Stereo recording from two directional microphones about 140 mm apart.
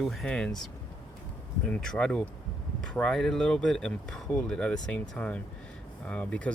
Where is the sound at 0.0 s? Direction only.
Centre (ahead or behind).